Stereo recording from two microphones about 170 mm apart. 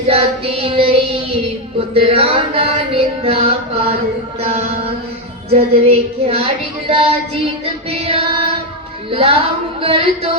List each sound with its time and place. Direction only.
0.1 s child singing: 35° right (ahead or behind)
1.9 s a sound: 35° right (ahead or behind)
4.4 s music: 40° right (ahead or behind)
5.5 s child singing: 35° right (ahead or behind)